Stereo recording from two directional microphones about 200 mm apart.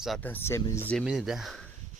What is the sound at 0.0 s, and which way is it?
Speech, 5° left (ahead or behind).